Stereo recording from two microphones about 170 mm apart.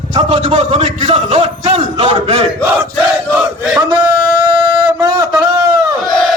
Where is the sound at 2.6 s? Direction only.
10° right (ahead or behind).